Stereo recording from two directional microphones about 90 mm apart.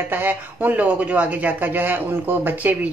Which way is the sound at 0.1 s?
20° right (ahead or behind).